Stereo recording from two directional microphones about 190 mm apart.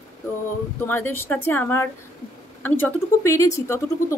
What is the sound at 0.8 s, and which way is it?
Speech, 10° left (ahead or behind).